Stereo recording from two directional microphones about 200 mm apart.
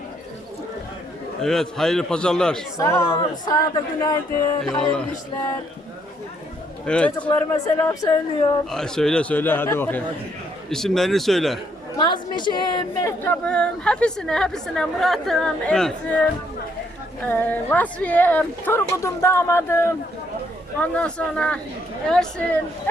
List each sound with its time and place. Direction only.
1.4 s a woman's voice: centre (ahead or behind)
4.6 s a woman's voice: 5° left (ahead or behind)
6.8 s a woman's voice: 5° left (ahead or behind)
8.7 s a woman's voice: 5° left (ahead or behind)
11.9 s a woman's voice: 20° left (ahead or behind); by 16.2 s 5° left (ahead or behind)
17.2 s a woman's voice: 10° left (ahead or behind)